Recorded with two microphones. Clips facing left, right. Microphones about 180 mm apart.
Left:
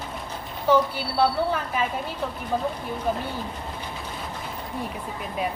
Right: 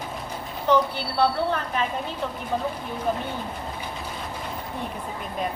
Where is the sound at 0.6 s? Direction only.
5° left (ahead or behind).